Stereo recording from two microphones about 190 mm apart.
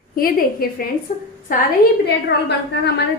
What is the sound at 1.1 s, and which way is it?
Speech, 40° left (ahead or behind).